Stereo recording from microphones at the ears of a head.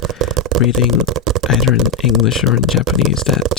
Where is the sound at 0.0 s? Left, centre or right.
Right.